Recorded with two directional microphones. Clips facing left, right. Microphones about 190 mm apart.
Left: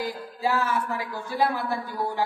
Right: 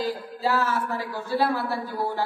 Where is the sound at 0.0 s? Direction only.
15° left (ahead or behind).